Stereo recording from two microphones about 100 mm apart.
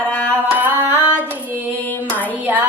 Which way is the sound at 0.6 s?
20° right (ahead or behind).